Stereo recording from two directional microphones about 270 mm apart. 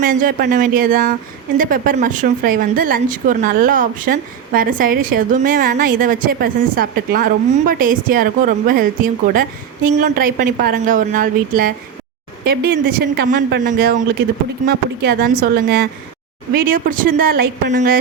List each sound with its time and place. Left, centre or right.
0.0 s a woman's voice: right